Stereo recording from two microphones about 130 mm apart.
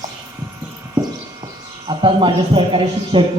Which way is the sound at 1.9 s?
40° right (ahead or behind).